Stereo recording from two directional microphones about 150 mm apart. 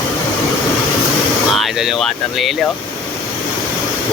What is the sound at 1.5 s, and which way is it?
Speech, centre (ahead or behind).